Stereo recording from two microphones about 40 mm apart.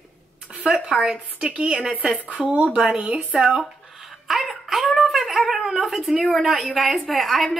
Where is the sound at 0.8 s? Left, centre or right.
Centre.